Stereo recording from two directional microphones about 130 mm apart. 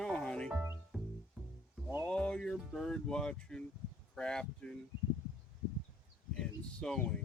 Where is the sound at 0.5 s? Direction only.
20° right (ahead or behind).